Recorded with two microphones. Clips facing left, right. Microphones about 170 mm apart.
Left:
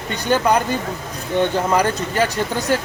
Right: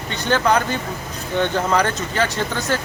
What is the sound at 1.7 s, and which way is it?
Speech, 10° left (ahead or behind).